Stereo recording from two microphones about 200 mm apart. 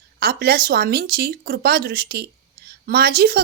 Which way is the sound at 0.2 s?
50° right (ahead or behind).